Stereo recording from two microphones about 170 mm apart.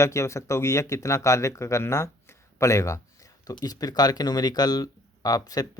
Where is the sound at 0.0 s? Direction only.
15° left (ahead or behind).